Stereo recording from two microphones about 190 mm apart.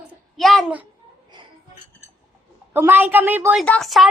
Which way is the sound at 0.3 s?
Centre (ahead or behind).